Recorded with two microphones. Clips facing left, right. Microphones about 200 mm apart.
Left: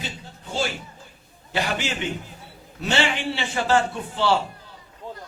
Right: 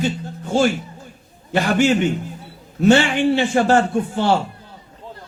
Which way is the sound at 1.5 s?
50° right (ahead or behind).